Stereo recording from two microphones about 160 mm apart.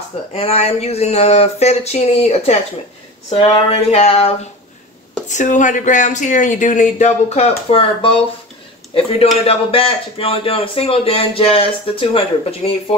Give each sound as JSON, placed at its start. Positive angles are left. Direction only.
{"t": 0.3, "sound": "a man's voice", "side_deg": 40}
{"t": 5.3, "sound": "speech", "side_deg": 50}
{"t": 9.3, "sound": "a man's voice", "side_deg": 35}